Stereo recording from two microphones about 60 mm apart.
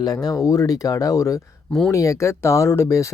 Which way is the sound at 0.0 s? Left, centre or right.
Left.